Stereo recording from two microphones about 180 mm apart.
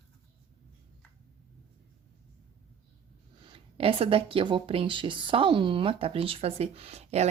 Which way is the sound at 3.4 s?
30° right (ahead or behind).